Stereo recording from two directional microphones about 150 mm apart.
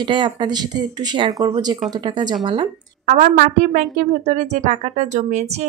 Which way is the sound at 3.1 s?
60° right (ahead or behind).